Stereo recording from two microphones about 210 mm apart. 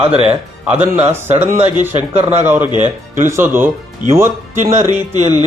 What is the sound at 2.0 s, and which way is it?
Speech, 30° right (ahead or behind).